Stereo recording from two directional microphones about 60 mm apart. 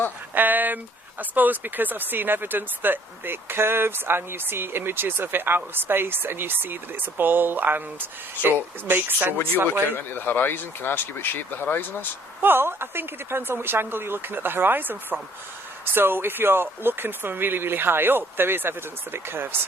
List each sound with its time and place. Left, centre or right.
0.3 s speech: right
9.9 s speech: left
12.4 s speech: right